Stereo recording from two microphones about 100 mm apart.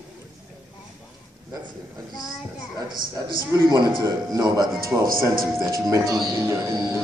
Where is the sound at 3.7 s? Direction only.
45° right (ahead or behind).